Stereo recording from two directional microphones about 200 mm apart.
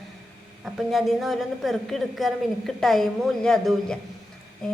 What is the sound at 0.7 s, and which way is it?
A woman's voice, centre (ahead or behind).